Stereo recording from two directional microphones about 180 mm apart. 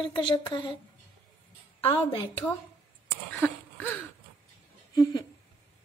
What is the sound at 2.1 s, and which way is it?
Speech, 25° left (ahead or behind).